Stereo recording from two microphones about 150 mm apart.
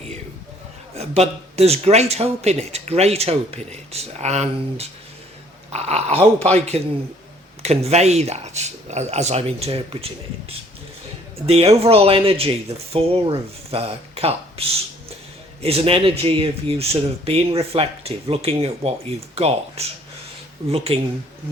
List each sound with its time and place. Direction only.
0.9 s speech: 45° right (ahead or behind)
7.6 s speech: 45° right (ahead or behind)
11.4 s speech: 40° right (ahead or behind)